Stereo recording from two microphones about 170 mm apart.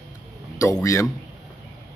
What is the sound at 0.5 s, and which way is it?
Speech, 20° left (ahead or behind).